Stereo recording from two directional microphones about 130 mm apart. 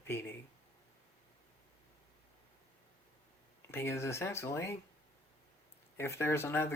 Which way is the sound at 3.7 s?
20° left (ahead or behind).